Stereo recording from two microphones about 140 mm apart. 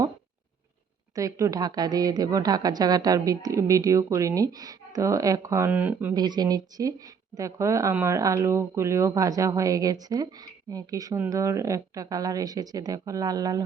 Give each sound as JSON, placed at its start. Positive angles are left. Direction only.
{"t": 1.1, "sound": "a woman's voice", "side_deg": -25}
{"t": 6.1, "sound": "a woman's voice", "side_deg": -30}